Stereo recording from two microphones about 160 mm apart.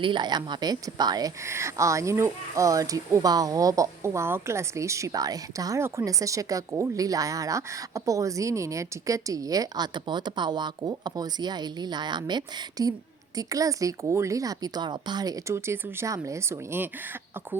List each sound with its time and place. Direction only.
0.0 s speech: 30° right (ahead or behind)